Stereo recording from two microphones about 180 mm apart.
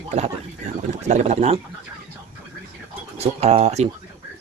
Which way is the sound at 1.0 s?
40° right (ahead or behind).